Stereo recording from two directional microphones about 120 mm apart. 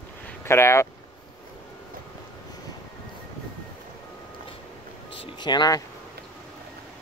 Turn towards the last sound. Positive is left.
turn(degrees=35)  # may be behind; listen again after turning